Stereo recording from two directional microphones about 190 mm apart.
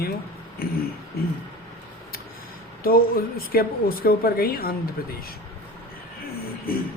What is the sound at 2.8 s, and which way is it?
A woman's voice, 50° left (ahead or behind).